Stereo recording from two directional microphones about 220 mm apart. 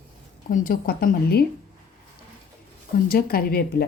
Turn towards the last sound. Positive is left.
turn(degrees=45)  # may be behind; listen again after turning